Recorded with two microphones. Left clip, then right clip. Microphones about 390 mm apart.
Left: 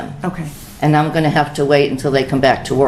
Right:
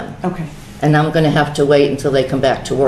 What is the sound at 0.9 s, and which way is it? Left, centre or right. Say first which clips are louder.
Speech: right 1 dB; left.